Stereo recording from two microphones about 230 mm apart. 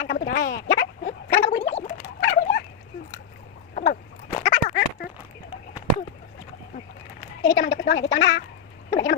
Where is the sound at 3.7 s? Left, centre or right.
Left.